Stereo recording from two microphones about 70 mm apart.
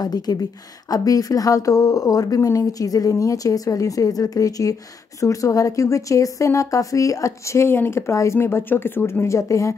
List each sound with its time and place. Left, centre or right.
0.0 s a woman's voice: left
8.1 s speech: left
8.4 s speech: left